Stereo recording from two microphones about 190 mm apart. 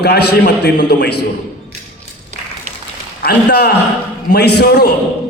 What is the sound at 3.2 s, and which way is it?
A man's voice, 55° left (ahead or behind).